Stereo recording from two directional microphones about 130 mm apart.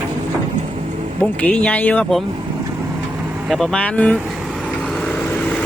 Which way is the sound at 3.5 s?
5° left (ahead or behind).